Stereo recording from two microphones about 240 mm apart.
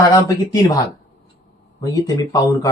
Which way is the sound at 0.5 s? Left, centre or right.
Centre.